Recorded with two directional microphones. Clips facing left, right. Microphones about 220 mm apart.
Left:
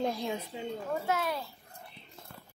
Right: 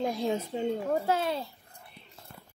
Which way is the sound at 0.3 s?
45° right (ahead or behind).